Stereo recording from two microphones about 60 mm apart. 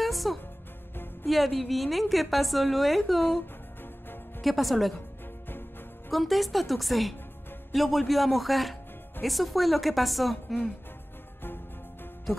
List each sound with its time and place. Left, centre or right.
0.0 s music: centre
1.2 s a woman's voice: centre
4.4 s a woman's voice: centre
6.1 s a woman's voice: centre
11.4 s music: left